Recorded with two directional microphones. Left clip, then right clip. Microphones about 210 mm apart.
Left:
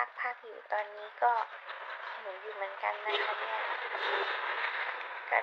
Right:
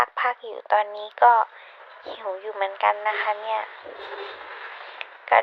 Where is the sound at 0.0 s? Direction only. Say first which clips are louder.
Right 12 dB; 40° right (ahead or behind).